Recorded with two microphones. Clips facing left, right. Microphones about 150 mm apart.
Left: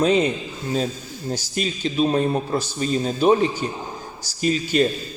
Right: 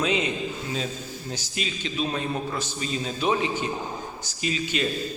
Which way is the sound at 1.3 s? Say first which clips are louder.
Left 8 dB; 40° left (ahead or behind).